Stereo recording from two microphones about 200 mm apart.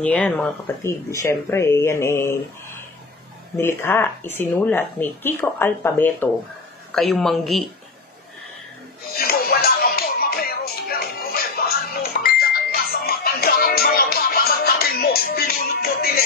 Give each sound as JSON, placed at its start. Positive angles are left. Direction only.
{"t": 0.0, "sound": "speech", "side_deg": 5}
{"t": 3.5, "sound": "a man's voice", "side_deg": 10}
{"t": 9.1, "sound": "music", "side_deg": 50}